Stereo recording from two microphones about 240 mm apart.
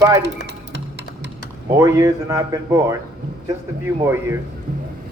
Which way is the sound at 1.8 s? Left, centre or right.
Centre.